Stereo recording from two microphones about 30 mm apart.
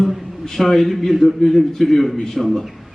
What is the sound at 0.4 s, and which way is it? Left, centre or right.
A man's voice, centre.